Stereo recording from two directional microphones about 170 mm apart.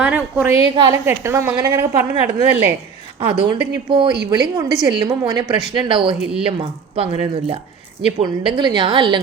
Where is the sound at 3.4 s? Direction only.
30° right (ahead or behind).